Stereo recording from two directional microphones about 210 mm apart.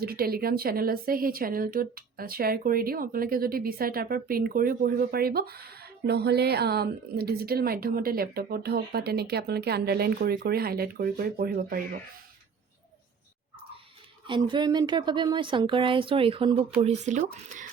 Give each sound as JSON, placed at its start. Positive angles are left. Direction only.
{"t": 0.0, "sound": "a woman's voice", "side_deg": -45}
{"t": 14.3, "sound": "speech", "side_deg": -20}